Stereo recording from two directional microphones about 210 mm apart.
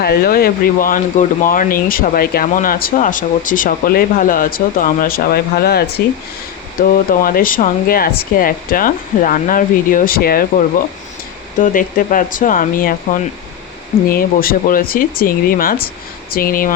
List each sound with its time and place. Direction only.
0.0 s speech: 45° left (ahead or behind)
11.5 s speech: 40° left (ahead or behind)